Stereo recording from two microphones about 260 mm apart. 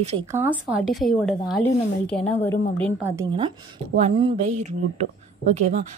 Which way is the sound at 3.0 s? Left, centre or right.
Centre.